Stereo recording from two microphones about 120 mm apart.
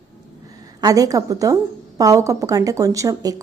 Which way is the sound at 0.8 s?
30° right (ahead or behind).